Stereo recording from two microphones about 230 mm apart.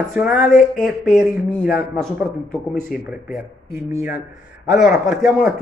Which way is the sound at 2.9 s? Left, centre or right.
Left.